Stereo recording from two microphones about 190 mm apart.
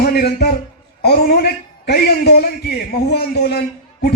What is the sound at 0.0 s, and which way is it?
A man's voice, 55° left (ahead or behind).